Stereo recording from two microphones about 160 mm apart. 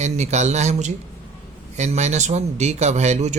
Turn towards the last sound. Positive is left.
turn(degrees=-45)  # may be behind; listen again after turning